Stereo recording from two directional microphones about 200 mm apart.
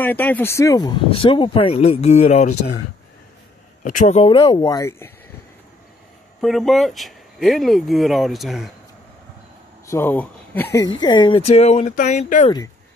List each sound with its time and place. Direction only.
0.0 s speech: 10° left (ahead or behind); by 2.5 s 35° left (ahead or behind)
3.8 s speech: 40° left (ahead or behind); by 5.1 s 15° left (ahead or behind)
6.4 s speech: centre (ahead or behind)
9.8 s speech: 10° left (ahead or behind); by 12.4 s 40° left (ahead or behind)